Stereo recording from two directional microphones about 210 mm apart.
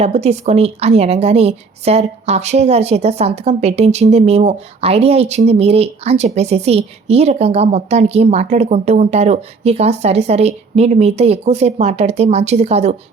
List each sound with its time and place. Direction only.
0.0 s a woman's voice: 30° right (ahead or behind)